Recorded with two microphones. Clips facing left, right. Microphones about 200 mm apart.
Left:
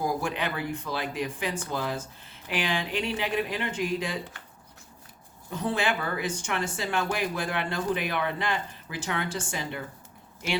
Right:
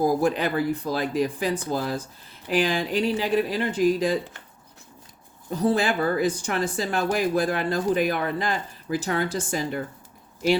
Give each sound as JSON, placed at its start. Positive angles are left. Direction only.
{"t": 0.0, "sound": "speech", "side_deg": -40}
{"t": 5.5, "sound": "speech", "side_deg": -35}